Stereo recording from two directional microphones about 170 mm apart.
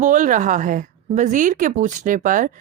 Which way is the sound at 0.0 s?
50° right (ahead or behind).